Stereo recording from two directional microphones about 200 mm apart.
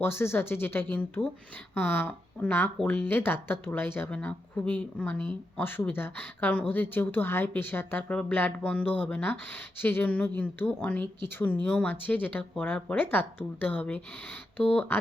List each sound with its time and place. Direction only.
0.0 s speech: 10° left (ahead or behind)